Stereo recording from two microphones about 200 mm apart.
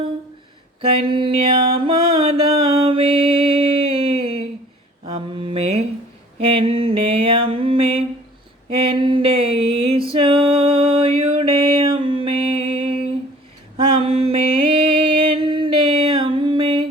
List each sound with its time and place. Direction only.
0.8 s mantra: 25° right (ahead or behind)
5.0 s a sound: 30° right (ahead or behind)
6.4 s mantra: 30° right (ahead or behind)
10.1 s music: 25° right (ahead or behind)
13.7 s mantra: 25° right (ahead or behind)